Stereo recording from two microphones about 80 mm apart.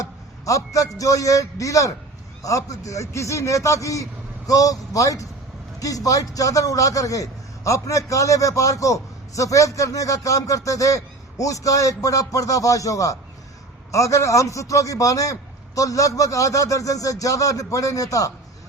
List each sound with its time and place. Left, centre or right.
0.0 s a man's voice: left